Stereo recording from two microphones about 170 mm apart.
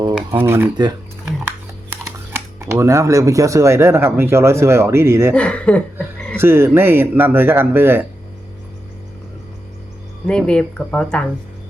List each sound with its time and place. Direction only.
0.3 s speech: 15° right (ahead or behind)
1.9 s speech: 15° right (ahead or behind)
5.3 s speech: 5° left (ahead or behind)
6.3 s speech: 15° right (ahead or behind)
10.2 s speech: 5° left (ahead or behind)